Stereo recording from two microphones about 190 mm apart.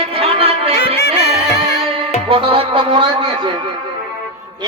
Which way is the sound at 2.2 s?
30° right (ahead or behind).